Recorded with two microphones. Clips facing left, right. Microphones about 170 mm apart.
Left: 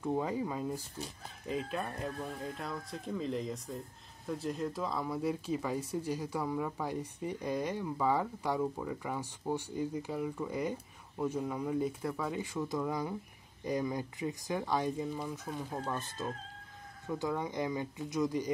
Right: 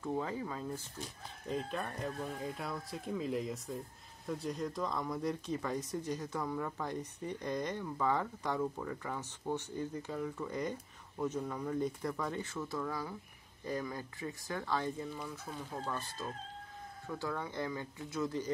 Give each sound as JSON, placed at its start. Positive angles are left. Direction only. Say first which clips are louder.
{"t": 0.0, "sound": "speech", "louder": "left 4 dB", "side_deg": 15}